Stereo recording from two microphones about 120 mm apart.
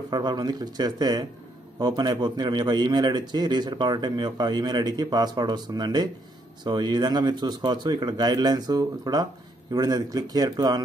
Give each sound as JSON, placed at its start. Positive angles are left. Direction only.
{"t": 0.1, "sound": "a man's voice", "side_deg": -35}